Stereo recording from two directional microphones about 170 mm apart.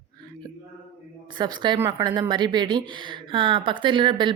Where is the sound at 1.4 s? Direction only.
25° right (ahead or behind).